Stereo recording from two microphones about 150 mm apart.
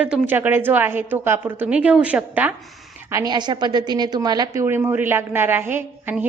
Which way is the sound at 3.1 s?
25° right (ahead or behind).